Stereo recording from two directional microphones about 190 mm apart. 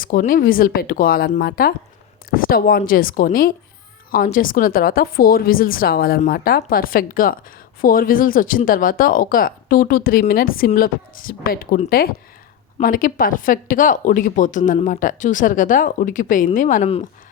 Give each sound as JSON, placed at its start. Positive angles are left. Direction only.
{"t": 0.0, "sound": "a woman's voice", "side_deg": 45}